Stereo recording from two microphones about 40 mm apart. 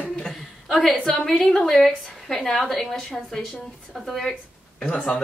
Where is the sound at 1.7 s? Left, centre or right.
Centre.